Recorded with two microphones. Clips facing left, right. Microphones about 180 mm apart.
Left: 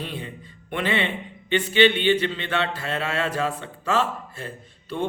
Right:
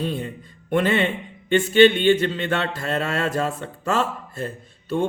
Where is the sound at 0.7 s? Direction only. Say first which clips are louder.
Right 5 dB; 45° right (ahead or behind).